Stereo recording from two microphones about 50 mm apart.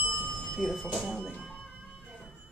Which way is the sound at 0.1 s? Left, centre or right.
Centre.